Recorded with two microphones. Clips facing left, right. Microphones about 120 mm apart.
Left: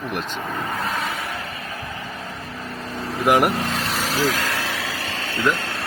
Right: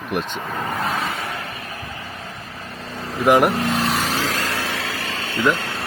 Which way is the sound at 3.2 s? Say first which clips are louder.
Right 3 dB; centre (ahead or behind).